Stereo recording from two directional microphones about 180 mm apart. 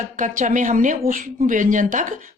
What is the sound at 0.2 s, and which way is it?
Speech, 45° right (ahead or behind).